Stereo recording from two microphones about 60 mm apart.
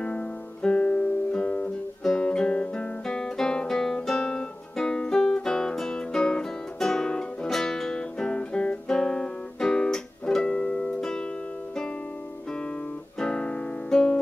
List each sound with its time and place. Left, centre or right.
0.0 s guitar: centre
13.2 s music: centre